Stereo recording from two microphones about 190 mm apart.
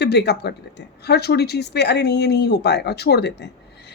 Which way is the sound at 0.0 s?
60° left (ahead or behind).